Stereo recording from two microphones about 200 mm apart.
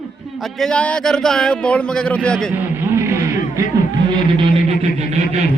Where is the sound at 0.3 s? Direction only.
Centre (ahead or behind).